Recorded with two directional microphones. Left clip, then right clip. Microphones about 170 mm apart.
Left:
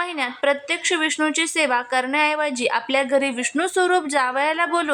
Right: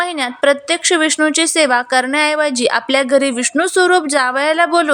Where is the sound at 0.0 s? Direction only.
25° right (ahead or behind).